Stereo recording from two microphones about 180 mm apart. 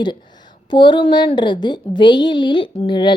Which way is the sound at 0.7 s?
25° left (ahead or behind).